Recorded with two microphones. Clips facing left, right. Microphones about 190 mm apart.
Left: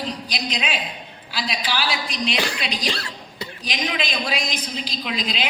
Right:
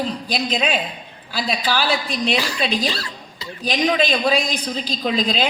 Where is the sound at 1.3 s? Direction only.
45° right (ahead or behind).